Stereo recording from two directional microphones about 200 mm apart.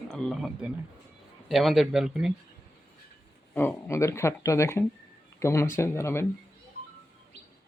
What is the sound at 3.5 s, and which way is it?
Speech, 10° left (ahead or behind).